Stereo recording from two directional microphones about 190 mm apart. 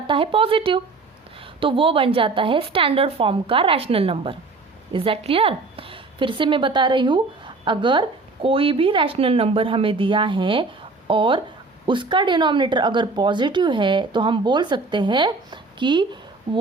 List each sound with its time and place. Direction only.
0.1 s a woman's voice: 30° right (ahead or behind)